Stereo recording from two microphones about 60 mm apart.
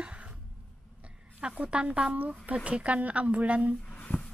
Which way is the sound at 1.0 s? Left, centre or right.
Centre.